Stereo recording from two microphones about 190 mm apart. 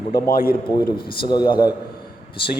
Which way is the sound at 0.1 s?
50° left (ahead or behind).